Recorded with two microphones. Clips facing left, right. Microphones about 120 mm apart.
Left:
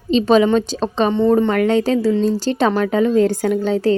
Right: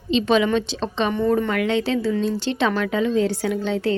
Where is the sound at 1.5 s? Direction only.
40° left (ahead or behind).